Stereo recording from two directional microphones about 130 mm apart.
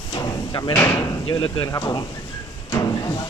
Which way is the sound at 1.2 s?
40° left (ahead or behind).